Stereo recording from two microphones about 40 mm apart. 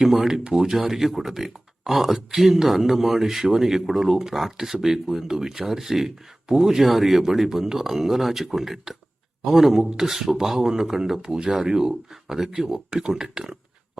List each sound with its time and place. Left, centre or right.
0.0 s speech: centre